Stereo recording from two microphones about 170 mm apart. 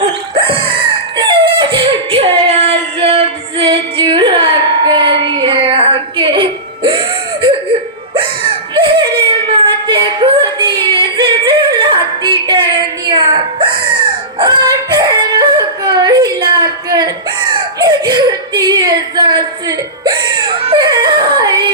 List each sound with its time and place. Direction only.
0.3 s a sound: 30° right (ahead or behind)
8.1 s whimper: 30° right (ahead or behind)
14.3 s yodeling: 25° right (ahead or behind)
17.5 s whimper: 25° right (ahead or behind)